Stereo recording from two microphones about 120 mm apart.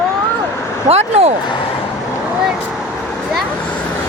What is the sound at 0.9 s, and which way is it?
Speech, 60° right (ahead or behind).